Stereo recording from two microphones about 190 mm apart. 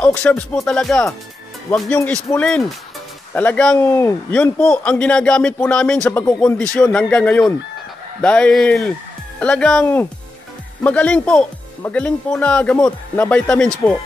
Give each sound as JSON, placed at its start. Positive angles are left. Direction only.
{"t": 0.0, "sound": "a man's voice", "side_deg": 10}